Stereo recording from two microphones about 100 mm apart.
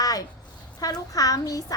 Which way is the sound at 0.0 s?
40° left (ahead or behind).